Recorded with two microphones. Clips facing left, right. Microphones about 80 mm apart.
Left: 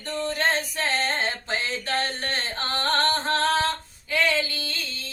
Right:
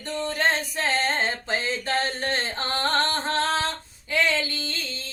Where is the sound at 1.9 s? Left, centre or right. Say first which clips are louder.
Right 2 dB; right.